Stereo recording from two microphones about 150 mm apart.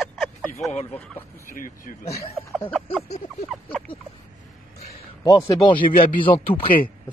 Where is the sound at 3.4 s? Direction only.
10° left (ahead or behind).